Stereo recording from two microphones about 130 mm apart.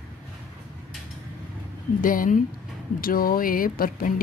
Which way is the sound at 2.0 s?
90° left.